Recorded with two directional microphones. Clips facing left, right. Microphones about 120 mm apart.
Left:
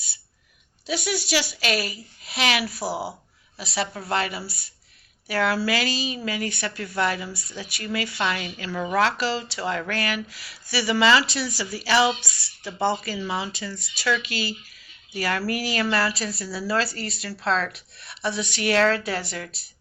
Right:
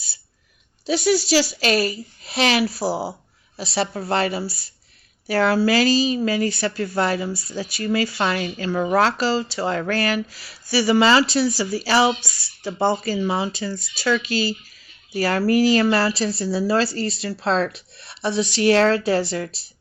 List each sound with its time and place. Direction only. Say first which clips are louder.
0.9 s a woman's voice: right 8 dB; 35° right (ahead or behind)